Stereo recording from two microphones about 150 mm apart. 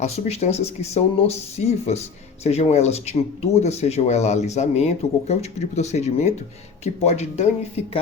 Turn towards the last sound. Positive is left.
turn(degrees=45)  # may be behind; listen again after turning